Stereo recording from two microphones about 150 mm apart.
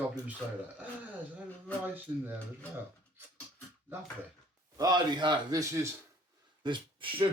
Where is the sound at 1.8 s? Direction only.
10° right (ahead or behind).